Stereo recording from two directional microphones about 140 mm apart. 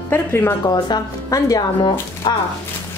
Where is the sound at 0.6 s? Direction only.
30° left (ahead or behind).